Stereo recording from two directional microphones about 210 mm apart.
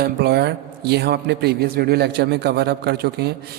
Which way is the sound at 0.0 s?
50° right (ahead or behind).